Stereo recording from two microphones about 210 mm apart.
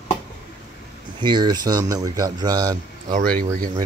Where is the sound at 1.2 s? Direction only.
20° right (ahead or behind).